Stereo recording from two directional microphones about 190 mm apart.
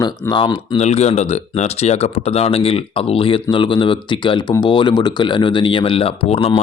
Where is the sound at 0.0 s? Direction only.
20° left (ahead or behind).